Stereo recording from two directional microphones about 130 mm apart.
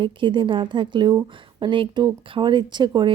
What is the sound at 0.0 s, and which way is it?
A woman's voice, 40° right (ahead or behind).